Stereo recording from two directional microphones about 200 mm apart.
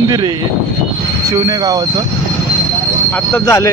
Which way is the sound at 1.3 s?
20° right (ahead or behind).